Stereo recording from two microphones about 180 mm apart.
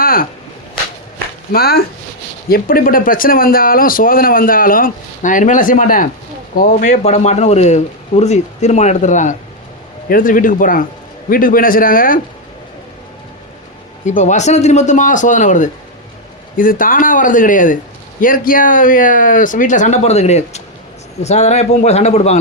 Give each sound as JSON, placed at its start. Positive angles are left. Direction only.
{"t": 0.0, "sound": "whip", "side_deg": 55}
{"t": 1.5, "sound": "a man's voice", "side_deg": 60}
{"t": 14.2, "sound": "a man's voice", "side_deg": 40}